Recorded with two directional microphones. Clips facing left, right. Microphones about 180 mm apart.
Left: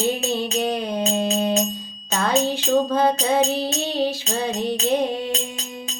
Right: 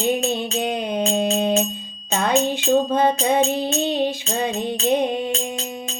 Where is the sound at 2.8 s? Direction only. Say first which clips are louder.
Right 1 dB; 25° right (ahead or behind).